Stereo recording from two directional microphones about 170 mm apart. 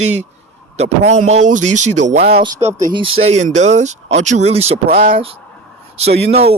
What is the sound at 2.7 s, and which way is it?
Speech, 25° right (ahead or behind).